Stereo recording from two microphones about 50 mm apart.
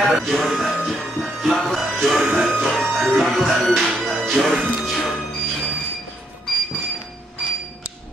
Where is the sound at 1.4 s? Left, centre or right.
Centre.